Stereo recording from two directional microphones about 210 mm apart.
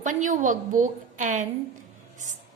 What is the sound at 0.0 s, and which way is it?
A woman's voice, 35° right (ahead or behind).